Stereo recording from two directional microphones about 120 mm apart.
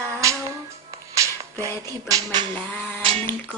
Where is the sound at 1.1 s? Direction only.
30° right (ahead or behind).